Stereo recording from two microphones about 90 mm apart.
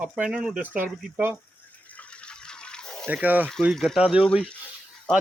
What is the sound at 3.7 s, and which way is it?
Speech, 5° left (ahead or behind).